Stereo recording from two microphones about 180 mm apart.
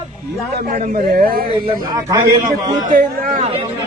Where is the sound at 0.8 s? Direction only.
55° right (ahead or behind).